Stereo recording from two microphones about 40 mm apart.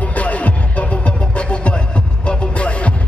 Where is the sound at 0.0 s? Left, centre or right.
Left.